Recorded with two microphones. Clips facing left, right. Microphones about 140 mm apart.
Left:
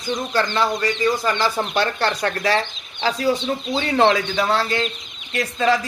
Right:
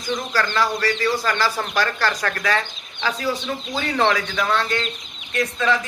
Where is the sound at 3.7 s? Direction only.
25° left (ahead or behind).